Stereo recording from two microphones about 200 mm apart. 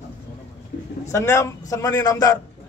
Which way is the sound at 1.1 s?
15° left (ahead or behind).